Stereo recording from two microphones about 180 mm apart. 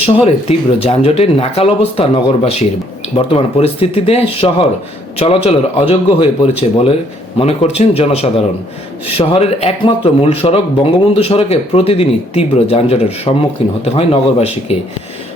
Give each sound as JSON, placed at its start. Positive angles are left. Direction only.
{"t": 0.0, "sound": "speech", "side_deg": 35}